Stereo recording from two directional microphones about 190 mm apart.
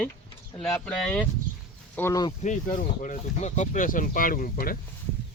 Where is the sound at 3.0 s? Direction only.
40° left (ahead or behind).